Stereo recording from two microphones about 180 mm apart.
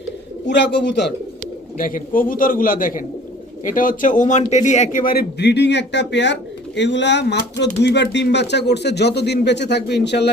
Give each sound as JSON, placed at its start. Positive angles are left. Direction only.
{"t": 0.4, "sound": "a man's voice", "side_deg": 75}
{"t": 1.8, "sound": "a man's voice", "side_deg": 50}